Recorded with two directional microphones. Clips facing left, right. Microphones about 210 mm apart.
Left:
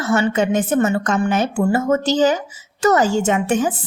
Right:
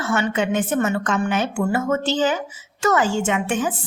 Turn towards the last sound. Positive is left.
turn(degrees=40)  # may be behind; listen again after turning